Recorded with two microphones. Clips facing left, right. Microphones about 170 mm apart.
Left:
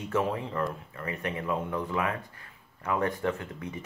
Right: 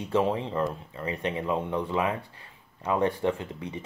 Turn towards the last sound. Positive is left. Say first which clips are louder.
# right 3 dB
turn(degrees=-30)  # may be behind; listen again after turning